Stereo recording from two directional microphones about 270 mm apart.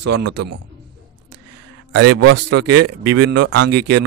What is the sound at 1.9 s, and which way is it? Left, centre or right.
Speech, right.